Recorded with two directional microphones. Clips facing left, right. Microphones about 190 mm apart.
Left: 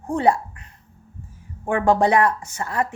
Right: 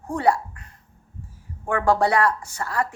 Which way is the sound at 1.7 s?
20° left (ahead or behind).